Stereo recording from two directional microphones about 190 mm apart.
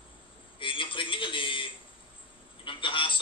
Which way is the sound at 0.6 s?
25° left (ahead or behind).